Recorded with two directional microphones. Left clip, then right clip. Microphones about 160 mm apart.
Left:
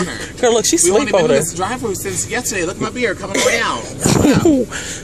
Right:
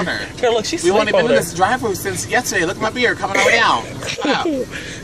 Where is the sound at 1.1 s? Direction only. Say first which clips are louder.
Left 2 dB; 75° left (ahead or behind).